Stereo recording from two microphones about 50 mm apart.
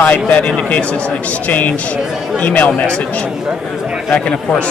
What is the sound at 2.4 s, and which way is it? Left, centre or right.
Speech, left.